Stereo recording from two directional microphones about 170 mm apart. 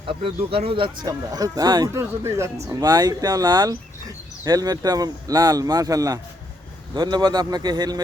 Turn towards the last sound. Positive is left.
turn(degrees=-25)  # may be behind; listen again after turning